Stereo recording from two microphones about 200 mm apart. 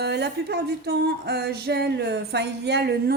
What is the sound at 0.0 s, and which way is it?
Speech, 55° right (ahead or behind).